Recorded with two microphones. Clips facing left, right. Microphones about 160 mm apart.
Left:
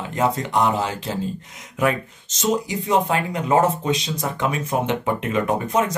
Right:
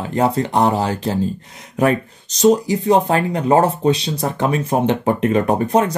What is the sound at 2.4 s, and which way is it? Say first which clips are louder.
Speech: right 8 dB; 35° right (ahead or behind).